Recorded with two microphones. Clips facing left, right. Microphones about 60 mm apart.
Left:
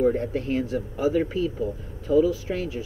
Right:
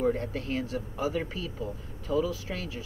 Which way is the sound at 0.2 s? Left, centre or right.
Centre.